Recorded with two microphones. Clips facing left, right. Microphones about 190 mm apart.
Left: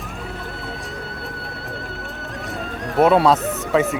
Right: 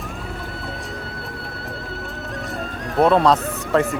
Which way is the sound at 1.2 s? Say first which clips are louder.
Even; centre (ahead or behind).